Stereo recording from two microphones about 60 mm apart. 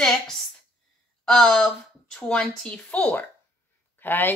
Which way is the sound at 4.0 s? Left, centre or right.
Left.